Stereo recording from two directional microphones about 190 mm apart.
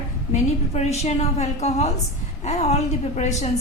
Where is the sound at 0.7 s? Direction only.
35° left (ahead or behind).